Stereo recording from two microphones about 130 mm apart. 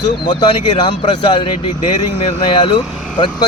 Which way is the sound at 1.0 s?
45° left (ahead or behind).